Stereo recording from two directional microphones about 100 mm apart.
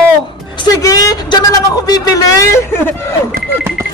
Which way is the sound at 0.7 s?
35° left (ahead or behind).